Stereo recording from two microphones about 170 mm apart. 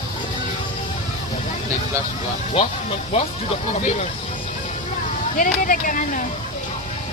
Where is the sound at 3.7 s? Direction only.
40° left (ahead or behind).